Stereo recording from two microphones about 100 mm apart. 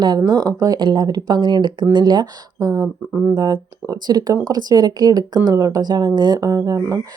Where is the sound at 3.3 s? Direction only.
50° right (ahead or behind).